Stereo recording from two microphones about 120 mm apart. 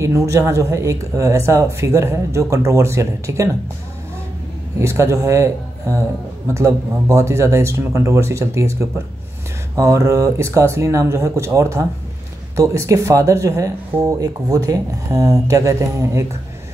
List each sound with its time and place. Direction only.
0.0 s speech: 25° right (ahead or behind)
4.7 s speech: 25° right (ahead or behind)
9.8 s speech: 25° right (ahead or behind)